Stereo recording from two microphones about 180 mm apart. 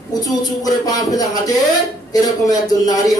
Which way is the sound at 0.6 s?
20° left (ahead or behind).